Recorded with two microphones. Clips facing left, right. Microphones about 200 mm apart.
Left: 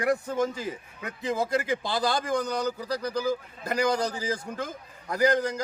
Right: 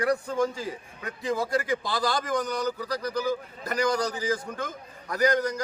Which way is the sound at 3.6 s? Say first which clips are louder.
Even; 25° left (ahead or behind).